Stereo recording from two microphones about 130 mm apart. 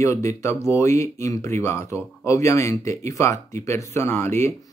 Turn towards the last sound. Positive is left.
turn(degrees=20)  # may be behind; listen again after turning